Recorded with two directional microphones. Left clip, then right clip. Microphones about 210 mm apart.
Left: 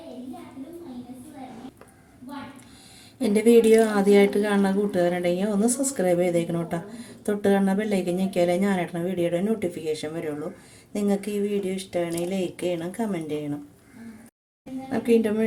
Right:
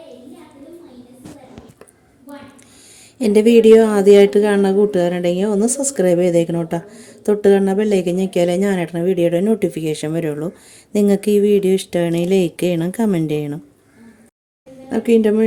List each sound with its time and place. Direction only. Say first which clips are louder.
3.2 s speech: right 6 dB; 35° right (ahead or behind)
14.8 s speech: right 7 dB; 35° right (ahead or behind)